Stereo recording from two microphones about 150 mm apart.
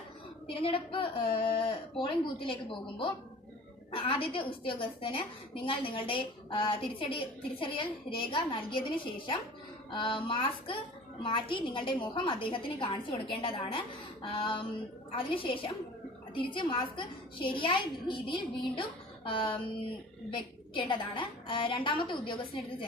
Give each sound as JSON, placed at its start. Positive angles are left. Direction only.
{"t": 0.4, "sound": "a woman's voice", "side_deg": 35}
{"t": 9.9, "sound": "a woman's voice", "side_deg": 35}
{"t": 20.7, "sound": "a woman's voice", "side_deg": 35}